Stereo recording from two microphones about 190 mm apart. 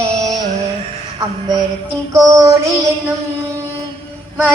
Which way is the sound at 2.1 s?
15° right (ahead or behind).